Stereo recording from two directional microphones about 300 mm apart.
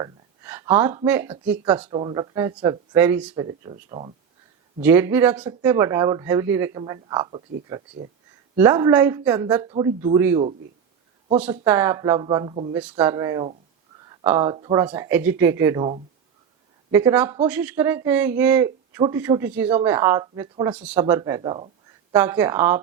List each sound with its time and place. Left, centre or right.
0.0 s speech: centre
1.9 s a man's voice: centre
4.8 s a man's voice: centre
11.6 s a man's voice: centre
12.8 s a man's voice: centre